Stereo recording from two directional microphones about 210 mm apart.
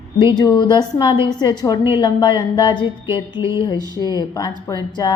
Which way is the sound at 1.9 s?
20° left (ahead or behind).